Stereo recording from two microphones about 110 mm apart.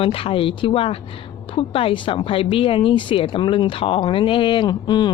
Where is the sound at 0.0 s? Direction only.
55° left (ahead or behind).